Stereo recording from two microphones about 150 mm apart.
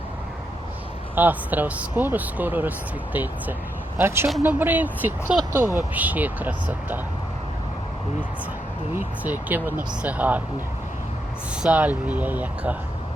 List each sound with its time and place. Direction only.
1.1 s speech: 10° right (ahead or behind)
9.2 s speech: 10° right (ahead or behind)
11.6 s speech: 10° right (ahead or behind)